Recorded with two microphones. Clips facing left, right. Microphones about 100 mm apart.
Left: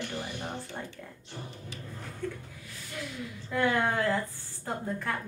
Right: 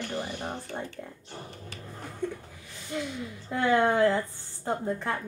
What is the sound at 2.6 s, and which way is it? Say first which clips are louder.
Speech: right 7 dB; 25° right (ahead or behind).